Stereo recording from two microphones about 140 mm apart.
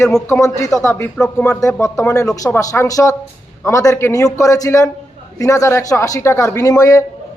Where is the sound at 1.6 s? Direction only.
20° left (ahead or behind).